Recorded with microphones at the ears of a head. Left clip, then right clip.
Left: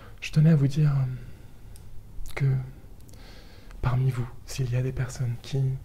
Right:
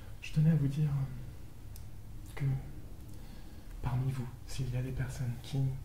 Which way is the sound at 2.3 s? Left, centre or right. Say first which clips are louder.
Left 10 dB; left.